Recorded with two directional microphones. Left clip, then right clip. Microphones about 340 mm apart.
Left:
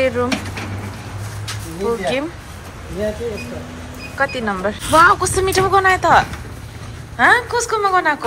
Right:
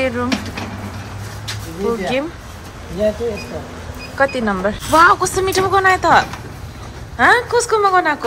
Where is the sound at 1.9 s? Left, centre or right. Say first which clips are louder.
Even; centre.